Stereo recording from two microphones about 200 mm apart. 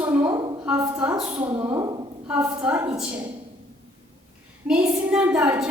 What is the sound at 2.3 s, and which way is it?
Speech, 10° right (ahead or behind).